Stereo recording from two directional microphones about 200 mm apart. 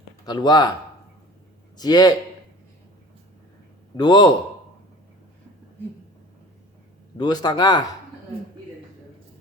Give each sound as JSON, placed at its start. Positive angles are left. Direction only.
{"t": 0.3, "sound": "a man's voice", "side_deg": 20}
{"t": 1.8, "sound": "a man's voice", "side_deg": 20}
{"t": 3.9, "sound": "a man's voice", "side_deg": 20}
{"t": 7.2, "sound": "a man's voice", "side_deg": 20}